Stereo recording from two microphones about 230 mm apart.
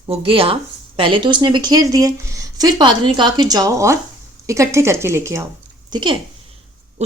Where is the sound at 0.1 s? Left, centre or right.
Right.